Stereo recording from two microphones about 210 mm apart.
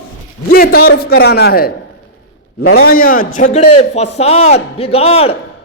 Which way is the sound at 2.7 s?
45° left (ahead or behind).